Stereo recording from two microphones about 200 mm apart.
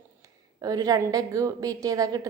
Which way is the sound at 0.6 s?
20° right (ahead or behind).